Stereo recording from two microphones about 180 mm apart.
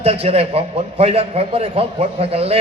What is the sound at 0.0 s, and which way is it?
A man's voice, 35° right (ahead or behind).